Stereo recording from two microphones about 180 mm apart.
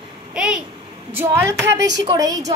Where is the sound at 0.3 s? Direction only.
5° right (ahead or behind).